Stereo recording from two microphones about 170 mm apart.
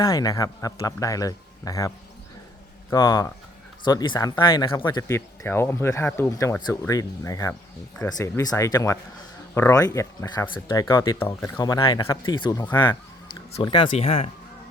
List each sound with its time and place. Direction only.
0.0 s speech: 20° left (ahead or behind)
2.9 s speech: 20° left (ahead or behind)